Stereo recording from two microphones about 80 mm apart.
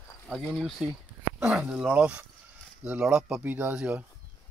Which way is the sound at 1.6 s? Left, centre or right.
Centre.